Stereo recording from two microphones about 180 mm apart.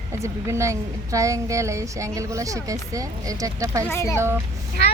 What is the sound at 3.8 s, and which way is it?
Speech, 15° left (ahead or behind).